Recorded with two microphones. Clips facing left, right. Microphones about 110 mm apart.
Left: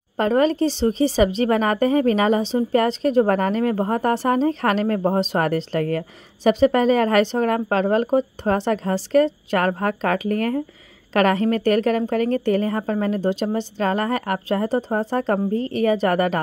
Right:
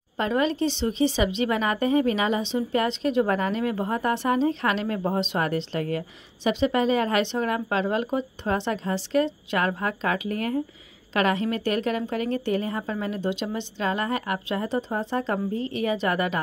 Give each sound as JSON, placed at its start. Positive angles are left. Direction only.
{"t": 0.2, "sound": "a woman's voice", "side_deg": 45}